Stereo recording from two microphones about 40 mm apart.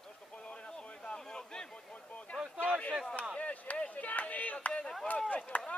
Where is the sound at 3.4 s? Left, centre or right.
Left.